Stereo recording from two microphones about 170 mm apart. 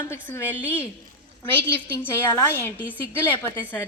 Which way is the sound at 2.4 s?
15° left (ahead or behind).